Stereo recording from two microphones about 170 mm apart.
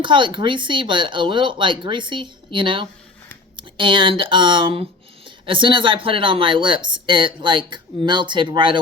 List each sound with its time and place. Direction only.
0.0 s speech: 30° right (ahead or behind)